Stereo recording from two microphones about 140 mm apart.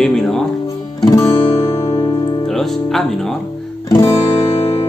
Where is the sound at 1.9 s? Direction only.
35° left (ahead or behind).